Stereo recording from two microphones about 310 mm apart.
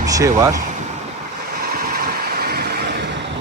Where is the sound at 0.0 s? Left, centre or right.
Centre.